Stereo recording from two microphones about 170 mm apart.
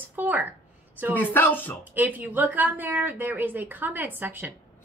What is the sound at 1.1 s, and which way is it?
Speech, 10° left (ahead or behind).